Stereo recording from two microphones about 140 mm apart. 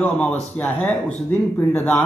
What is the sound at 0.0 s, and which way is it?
Speech, 10° left (ahead or behind).